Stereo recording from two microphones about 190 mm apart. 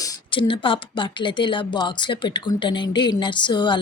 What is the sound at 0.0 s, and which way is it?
A woman's voice, 25° left (ahead or behind).